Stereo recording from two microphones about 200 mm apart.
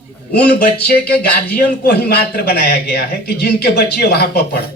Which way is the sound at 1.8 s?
50° left (ahead or behind).